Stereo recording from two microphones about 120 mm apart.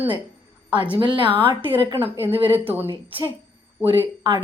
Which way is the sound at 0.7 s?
45° right (ahead or behind).